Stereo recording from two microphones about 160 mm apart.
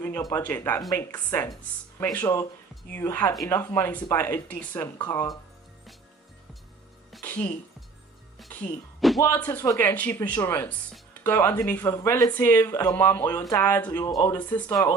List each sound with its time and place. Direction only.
0.0 s speech: 20° left (ahead or behind)
7.2 s music: 10° left (ahead or behind)
9.0 s music: centre (ahead or behind)
9.3 s speech: 10° left (ahead or behind)